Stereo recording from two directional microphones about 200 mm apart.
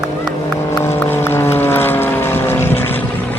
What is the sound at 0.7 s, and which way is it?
Vehicle, 10° left (ahead or behind).